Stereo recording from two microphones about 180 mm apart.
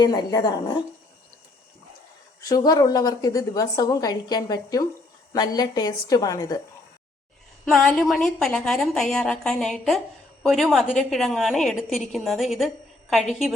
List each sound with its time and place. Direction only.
0.0 s a woman's voice: 25° left (ahead or behind)
2.4 s a woman's voice: 20° left (ahead or behind)
7.6 s a woman's voice: centre (ahead or behind)